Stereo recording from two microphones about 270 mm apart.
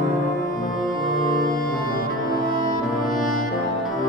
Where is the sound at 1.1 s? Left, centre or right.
Left.